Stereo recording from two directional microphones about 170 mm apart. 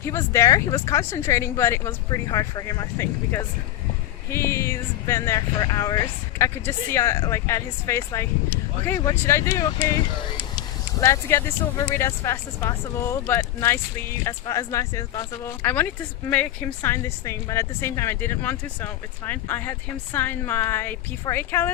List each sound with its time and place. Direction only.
0.0 s speech: 15° left (ahead or behind)
11.0 s speech: 15° left (ahead or behind)
15.6 s speech: 10° left (ahead or behind)